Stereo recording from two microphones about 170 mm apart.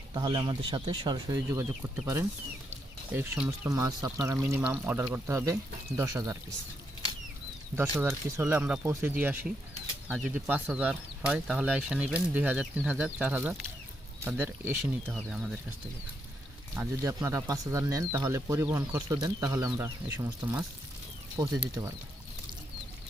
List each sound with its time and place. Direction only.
0.1 s speech: 25° right (ahead or behind); by 3.7 s 10° right (ahead or behind)
3.7 s speech: 20° right (ahead or behind)
7.8 s speech: 15° right (ahead or behind)
15.1 s speech: 5° right (ahead or behind)
16.7 s speech: 15° right (ahead or behind)